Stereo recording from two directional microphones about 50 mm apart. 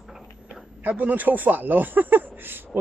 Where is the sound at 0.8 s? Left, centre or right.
Right.